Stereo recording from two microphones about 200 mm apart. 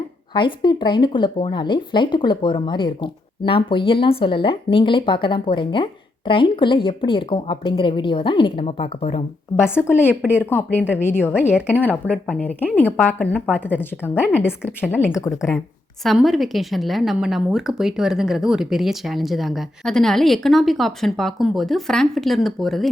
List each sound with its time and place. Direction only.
0.3 s speech: 20° left (ahead or behind)
9.6 s a woman's voice: 10° left (ahead or behind)
10.1 s speech: 5° right (ahead or behind)
10.4 s a woman's voice: 10° left (ahead or behind)
16.0 s a woman's voice: centre (ahead or behind)